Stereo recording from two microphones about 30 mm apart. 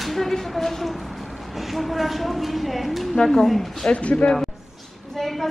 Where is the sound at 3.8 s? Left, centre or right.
Left.